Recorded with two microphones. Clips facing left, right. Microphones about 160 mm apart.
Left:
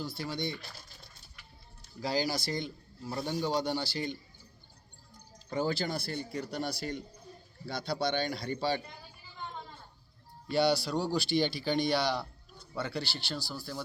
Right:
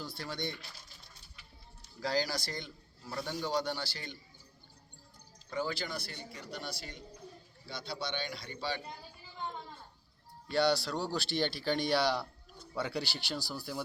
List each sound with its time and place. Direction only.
0.0 s speech: 5° left (ahead or behind)
2.0 s a man's voice: 10° left (ahead or behind)
5.5 s a man's voice: 35° left (ahead or behind)
10.5 s speech: 5° left (ahead or behind); by 13.8 s 10° right (ahead or behind)